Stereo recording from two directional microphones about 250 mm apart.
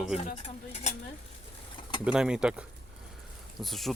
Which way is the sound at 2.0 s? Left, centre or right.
Centre.